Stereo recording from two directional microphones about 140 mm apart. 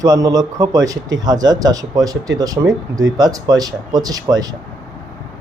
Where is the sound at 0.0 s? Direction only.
25° right (ahead or behind).